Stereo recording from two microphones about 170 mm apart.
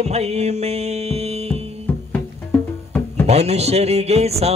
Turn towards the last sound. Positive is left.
turn(degrees=-40)  # may be behind; listen again after turning